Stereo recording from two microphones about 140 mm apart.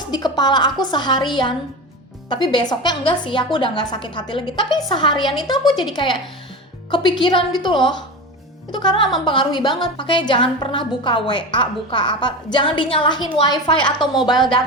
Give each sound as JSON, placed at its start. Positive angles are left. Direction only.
{"t": 0.1, "sound": "a woman's voice", "side_deg": 30}